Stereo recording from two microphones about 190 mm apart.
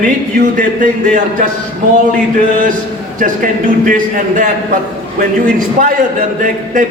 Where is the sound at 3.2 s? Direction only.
45° right (ahead or behind).